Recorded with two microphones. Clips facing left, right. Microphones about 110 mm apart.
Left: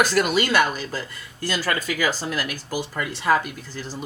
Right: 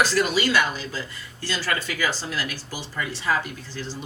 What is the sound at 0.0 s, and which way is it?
A woman's voice, 55° left (ahead or behind).